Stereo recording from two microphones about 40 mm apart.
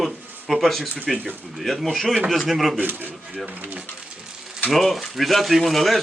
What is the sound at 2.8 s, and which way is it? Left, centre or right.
Speech, right.